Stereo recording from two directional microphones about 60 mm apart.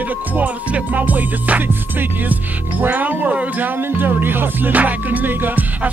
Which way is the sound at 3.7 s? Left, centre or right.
Right.